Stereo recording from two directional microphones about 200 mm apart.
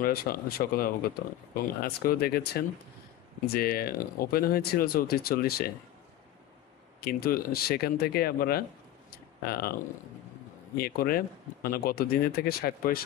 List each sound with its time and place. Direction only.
0.0 s speech: 50° left (ahead or behind)
7.0 s speech: 50° left (ahead or behind)
10.8 s speech: 50° left (ahead or behind)